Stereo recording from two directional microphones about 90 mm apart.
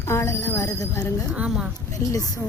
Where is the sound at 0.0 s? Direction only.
35° left (ahead or behind).